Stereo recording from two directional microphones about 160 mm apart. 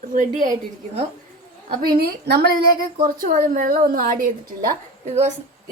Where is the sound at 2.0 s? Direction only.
85° right.